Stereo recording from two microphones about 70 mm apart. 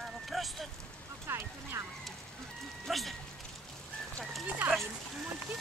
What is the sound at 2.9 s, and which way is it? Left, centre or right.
Speech, centre.